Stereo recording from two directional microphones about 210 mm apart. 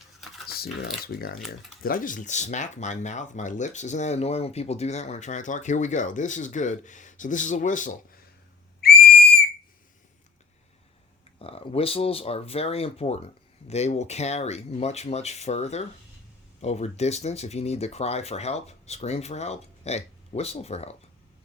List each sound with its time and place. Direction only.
0.4 s typing: 45° left (ahead or behind)
1.0 s speech: 45° left (ahead or behind)
8.8 s whistle: 50° left (ahead or behind)
11.3 s speech: 25° left (ahead or behind)